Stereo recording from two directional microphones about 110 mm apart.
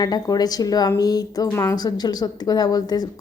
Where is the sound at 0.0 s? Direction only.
35° left (ahead or behind).